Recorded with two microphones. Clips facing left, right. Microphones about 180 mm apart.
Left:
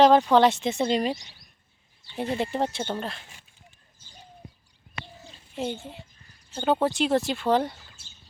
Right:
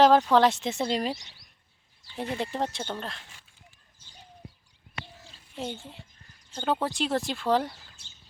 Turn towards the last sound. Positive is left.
turn(degrees=0)  # may be behind; listen again after turning